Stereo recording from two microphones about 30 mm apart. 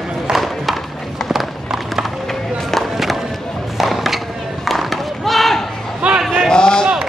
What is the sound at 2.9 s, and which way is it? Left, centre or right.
Music, centre.